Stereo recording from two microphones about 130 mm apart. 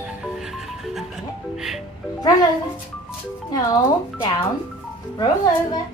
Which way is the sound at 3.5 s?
35° left (ahead or behind).